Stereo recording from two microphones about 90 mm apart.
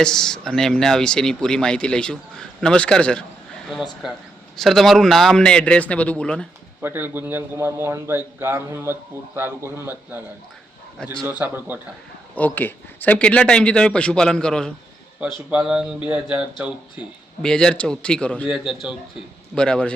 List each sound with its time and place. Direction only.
0.0 s speech: 5° left (ahead or behind)
4.5 s speech: 5° left (ahead or behind)
6.8 s a man's voice: 20° right (ahead or behind)
11.3 s a man's voice: 20° right (ahead or behind)
12.5 s speech: 20° left (ahead or behind)
15.4 s speech: 10° right (ahead or behind)
17.4 s speech: 10° left (ahead or behind)
18.4 s speech: 5° right (ahead or behind)
19.5 s speech: 10° left (ahead or behind)